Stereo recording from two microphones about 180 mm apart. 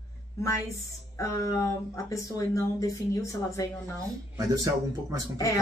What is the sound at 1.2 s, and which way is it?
Speech, 15° left (ahead or behind).